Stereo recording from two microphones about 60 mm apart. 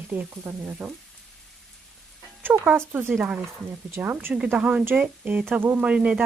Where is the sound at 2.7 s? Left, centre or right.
Right.